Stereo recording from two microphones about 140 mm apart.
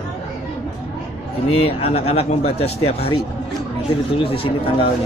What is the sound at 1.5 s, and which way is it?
Speech, 45° left (ahead or behind).